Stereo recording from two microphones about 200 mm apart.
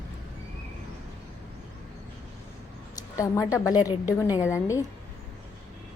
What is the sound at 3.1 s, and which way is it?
A woman's voice, 15° left (ahead or behind).